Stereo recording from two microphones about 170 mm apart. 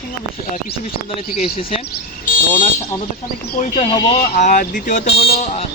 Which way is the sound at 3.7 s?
25° left (ahead or behind).